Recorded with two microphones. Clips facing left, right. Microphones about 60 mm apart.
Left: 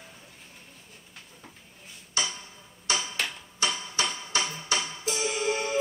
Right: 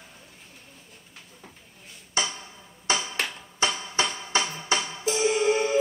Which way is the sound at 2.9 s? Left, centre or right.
Right.